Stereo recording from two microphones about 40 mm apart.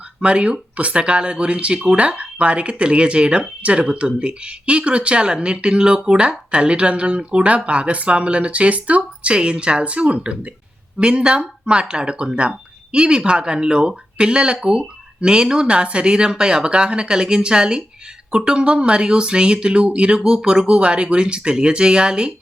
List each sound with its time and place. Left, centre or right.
0.2 s speech: right